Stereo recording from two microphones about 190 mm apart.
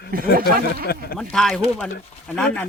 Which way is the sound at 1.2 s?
5° left (ahead or behind).